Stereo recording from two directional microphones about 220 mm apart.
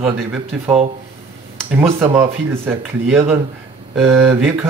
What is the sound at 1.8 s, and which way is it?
Speech, 10° right (ahead or behind).